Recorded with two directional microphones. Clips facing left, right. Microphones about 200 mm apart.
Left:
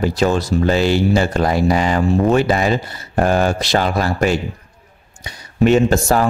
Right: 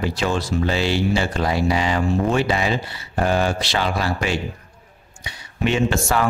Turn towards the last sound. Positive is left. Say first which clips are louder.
# left 5 dB
turn(degrees=40)  # may be behind; listen again after turning